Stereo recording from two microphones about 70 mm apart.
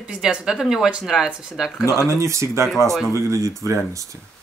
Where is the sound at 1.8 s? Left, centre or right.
Left.